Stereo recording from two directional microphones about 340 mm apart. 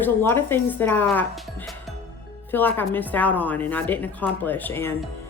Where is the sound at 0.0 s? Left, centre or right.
Centre.